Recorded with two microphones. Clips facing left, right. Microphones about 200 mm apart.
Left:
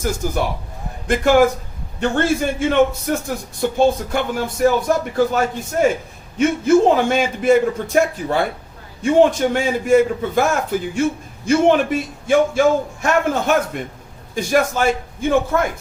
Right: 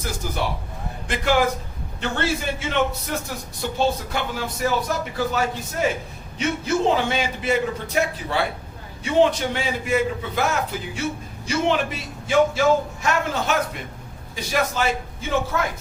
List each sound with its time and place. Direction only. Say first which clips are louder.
0.0 s a man's voice: left 6 dB; 45° left (ahead or behind)